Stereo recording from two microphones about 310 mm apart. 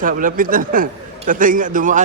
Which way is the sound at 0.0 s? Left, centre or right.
Right.